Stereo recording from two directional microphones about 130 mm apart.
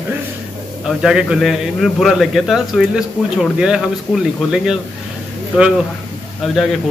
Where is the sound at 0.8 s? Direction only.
5° right (ahead or behind).